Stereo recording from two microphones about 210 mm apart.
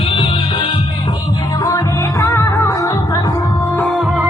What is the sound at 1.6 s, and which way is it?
Music, 15° left (ahead or behind).